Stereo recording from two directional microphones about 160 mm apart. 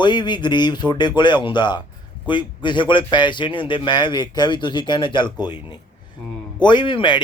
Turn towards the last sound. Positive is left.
turn(degrees=30)  # may be behind; listen again after turning